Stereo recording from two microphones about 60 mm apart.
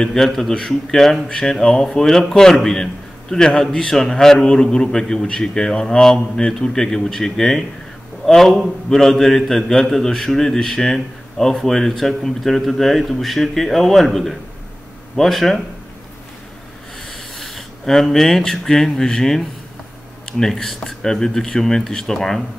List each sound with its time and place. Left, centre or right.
0.0 s a man's voice: centre
17.1 s a man's voice: centre